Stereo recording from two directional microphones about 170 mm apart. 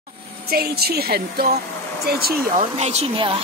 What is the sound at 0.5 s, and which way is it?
A woman's voice, 65° right (ahead or behind).